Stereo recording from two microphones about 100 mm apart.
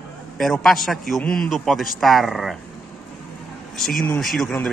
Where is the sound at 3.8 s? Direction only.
Centre (ahead or behind).